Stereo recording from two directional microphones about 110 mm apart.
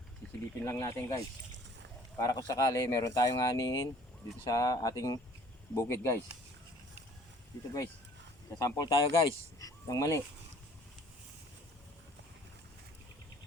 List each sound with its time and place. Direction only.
0.6 s speech: 25° left (ahead or behind)
2.2 s speech: 35° left (ahead or behind)
8.5 s speech: 35° left (ahead or behind)